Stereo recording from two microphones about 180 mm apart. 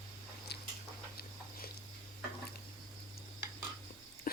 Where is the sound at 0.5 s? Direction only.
65° left (ahead or behind).